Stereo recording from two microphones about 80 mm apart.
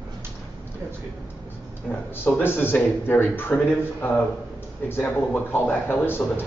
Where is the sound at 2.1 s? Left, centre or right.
Left.